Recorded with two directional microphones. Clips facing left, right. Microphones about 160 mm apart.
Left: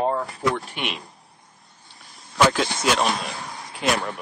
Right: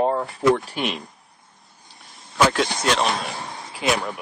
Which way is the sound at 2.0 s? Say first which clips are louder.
Even; centre (ahead or behind).